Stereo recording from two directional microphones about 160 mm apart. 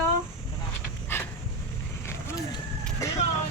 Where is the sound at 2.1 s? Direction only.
15° left (ahead or behind).